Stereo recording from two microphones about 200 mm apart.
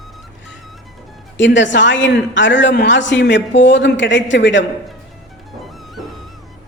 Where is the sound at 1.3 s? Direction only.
65° left (ahead or behind).